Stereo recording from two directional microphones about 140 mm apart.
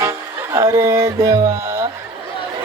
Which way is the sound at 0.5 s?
25° right (ahead or behind).